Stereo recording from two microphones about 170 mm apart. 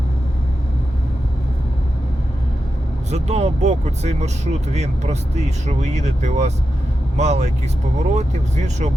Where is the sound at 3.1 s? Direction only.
40° right (ahead or behind).